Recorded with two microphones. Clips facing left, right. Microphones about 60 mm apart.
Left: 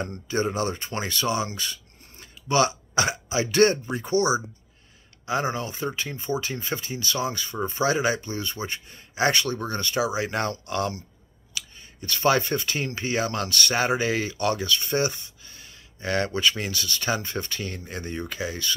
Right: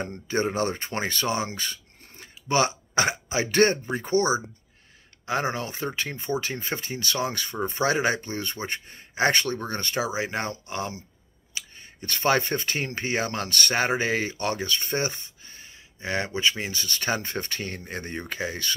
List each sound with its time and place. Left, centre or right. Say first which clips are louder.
0.3 s speech: right 1 dB; right
11.5 s speech: left 1 dB; right
16.0 s rub: left 2 dB; right
16.8 s speech: even; right